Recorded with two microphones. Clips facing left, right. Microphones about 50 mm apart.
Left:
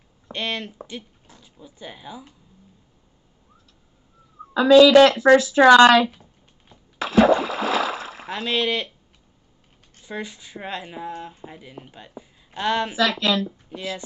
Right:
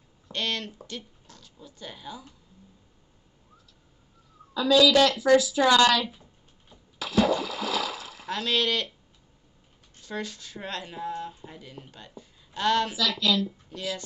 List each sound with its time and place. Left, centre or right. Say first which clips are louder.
0.3 s speech: left 2 dB; centre
4.6 s speech: left 8 dB; left
6.7 s splash: left 7 dB; left
8.3 s speech: left 3 dB; centre
10.0 s speech: left 2 dB; centre
12.9 s speech: left 5 dB; left
13.7 s speech: left 2 dB; left